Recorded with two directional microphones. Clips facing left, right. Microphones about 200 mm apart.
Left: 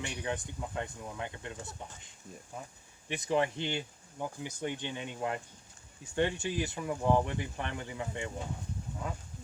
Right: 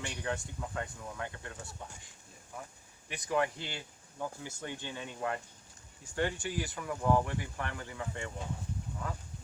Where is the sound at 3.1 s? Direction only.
25° left (ahead or behind).